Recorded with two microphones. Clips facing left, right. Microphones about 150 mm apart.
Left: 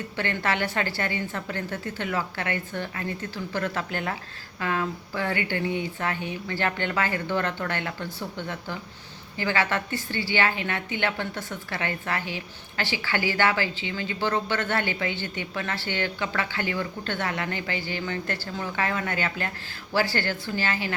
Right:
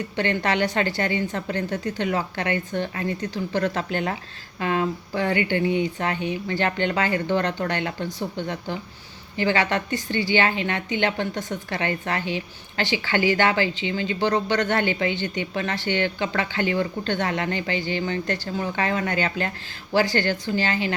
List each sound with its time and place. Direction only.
0.2 s a woman's voice: 20° right (ahead or behind)